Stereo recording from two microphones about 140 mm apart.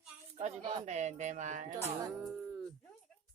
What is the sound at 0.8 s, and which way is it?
Speech, 55° right (ahead or behind).